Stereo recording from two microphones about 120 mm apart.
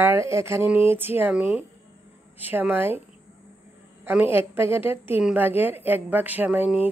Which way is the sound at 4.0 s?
15° right (ahead or behind).